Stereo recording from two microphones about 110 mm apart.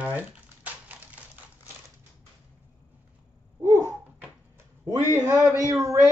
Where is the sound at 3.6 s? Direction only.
30° right (ahead or behind).